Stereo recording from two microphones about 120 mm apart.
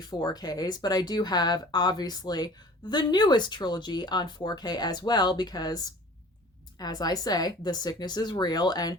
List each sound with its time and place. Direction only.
0.0 s speech: 35° left (ahead or behind)